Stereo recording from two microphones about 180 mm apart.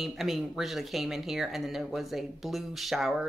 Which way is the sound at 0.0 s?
Centre (ahead or behind).